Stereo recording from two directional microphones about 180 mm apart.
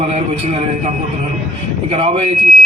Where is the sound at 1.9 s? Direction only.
35° right (ahead or behind).